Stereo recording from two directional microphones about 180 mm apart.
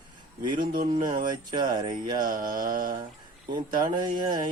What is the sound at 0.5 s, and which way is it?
Speech, 50° right (ahead or behind).